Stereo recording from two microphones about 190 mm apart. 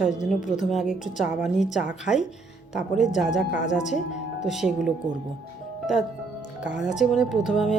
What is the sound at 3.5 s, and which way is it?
Speech, 40° left (ahead or behind).